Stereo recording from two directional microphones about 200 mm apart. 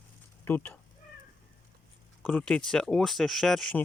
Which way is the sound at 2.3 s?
5° left (ahead or behind).